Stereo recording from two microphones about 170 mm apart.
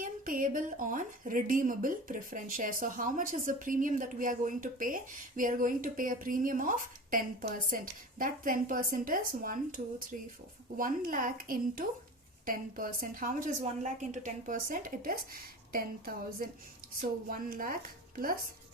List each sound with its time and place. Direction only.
0.0 s a woman's voice: 55° right (ahead or behind)